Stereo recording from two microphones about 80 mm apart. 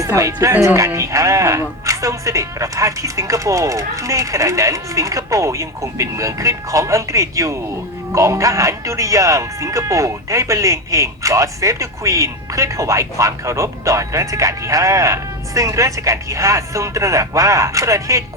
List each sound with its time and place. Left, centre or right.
0.0 s speech: right